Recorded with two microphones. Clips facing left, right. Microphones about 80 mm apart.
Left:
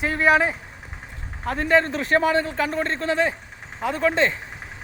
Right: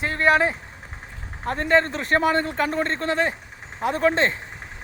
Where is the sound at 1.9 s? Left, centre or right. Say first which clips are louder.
Left 1 dB; right.